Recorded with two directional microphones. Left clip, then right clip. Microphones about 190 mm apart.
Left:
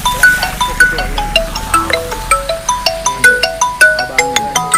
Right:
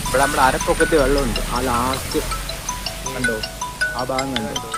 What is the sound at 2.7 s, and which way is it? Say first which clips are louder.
Music: left 14 dB; 50° left (ahead or behind).